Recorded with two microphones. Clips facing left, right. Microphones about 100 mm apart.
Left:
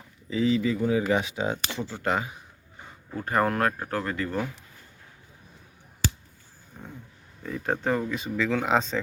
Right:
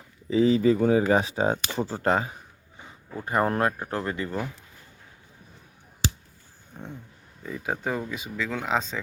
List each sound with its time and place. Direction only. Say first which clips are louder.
0.3 s speech: right 4 dB; 35° right (ahead or behind)
3.2 s speech: even; 15° right (ahead or behind)
6.8 s dog: right 3 dB; 30° right (ahead or behind)
7.4 s speech: left 2 dB; 5° right (ahead or behind)